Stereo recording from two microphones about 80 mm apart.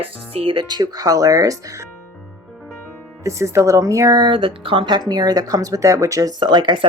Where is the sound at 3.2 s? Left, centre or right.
Right.